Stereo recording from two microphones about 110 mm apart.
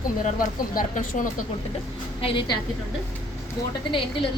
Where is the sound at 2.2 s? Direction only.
50° left (ahead or behind).